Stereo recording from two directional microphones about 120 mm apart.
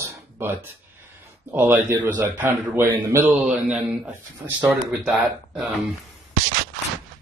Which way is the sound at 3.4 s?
5° right (ahead or behind).